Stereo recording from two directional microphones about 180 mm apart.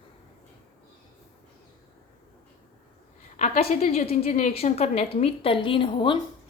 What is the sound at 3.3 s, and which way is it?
A woman's voice, 40° left (ahead or behind).